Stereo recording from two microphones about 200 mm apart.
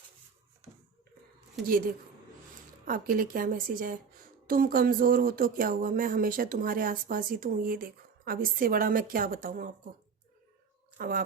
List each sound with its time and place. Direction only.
1.6 s speech: 45° right (ahead or behind)
10.9 s speech: 45° right (ahead or behind)